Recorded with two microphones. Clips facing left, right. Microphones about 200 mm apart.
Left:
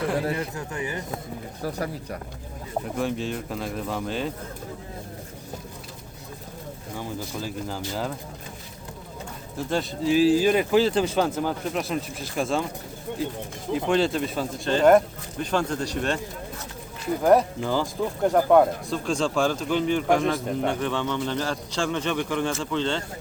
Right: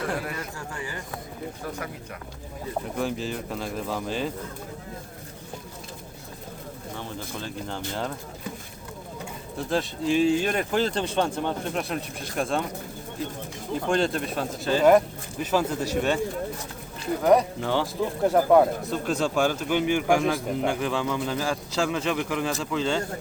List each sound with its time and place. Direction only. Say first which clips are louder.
0.2 s speech: left 6 dB; 30° left (ahead or behind)
2.9 s speech: left 2 dB; centre (ahead or behind)
6.9 s speech: left 4 dB; 5° left (ahead or behind)
9.6 s speech: even; centre (ahead or behind)
13.7 s speech: left 2 dB; 5° left (ahead or behind)
17.2 s a man's voice: left 1 dB; centre (ahead or behind)